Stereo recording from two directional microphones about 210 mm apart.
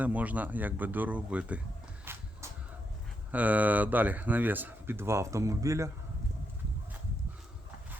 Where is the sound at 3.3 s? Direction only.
5° right (ahead or behind).